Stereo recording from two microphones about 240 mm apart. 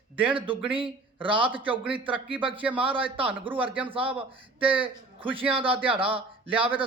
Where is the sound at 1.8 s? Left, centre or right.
Centre.